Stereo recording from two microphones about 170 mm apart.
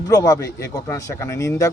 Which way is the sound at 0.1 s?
20° left (ahead or behind).